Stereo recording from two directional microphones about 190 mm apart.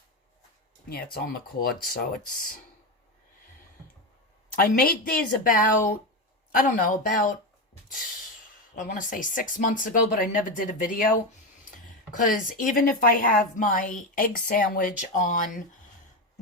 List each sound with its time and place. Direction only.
1.1 s a woman's voice: 50° left (ahead or behind)
4.5 s a woman's voice: 50° left (ahead or behind)
8.7 s a woman's voice: 45° left (ahead or behind)
12.1 s a woman's voice: 45° left (ahead or behind)